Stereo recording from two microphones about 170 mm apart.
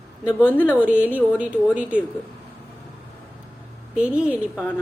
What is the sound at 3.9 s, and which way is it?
Speech, 5° right (ahead or behind).